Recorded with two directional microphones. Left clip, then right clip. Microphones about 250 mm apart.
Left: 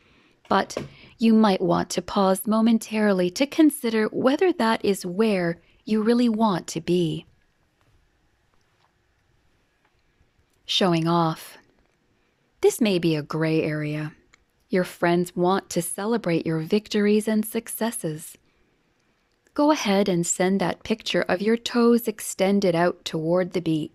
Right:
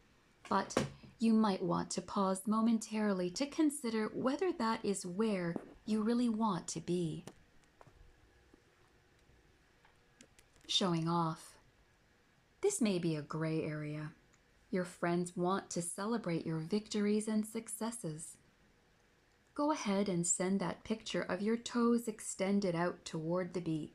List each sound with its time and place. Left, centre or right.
0.4 s speech: left
10.7 s speech: left
19.5 s speech: left